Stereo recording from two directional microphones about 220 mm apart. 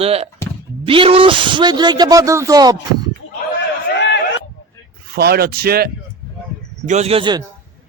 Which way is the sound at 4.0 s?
50° left (ahead or behind).